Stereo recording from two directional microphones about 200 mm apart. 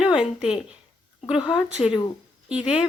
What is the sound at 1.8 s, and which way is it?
Speech, 30° left (ahead or behind).